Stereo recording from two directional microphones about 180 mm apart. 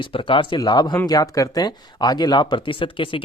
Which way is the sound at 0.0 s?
30° left (ahead or behind).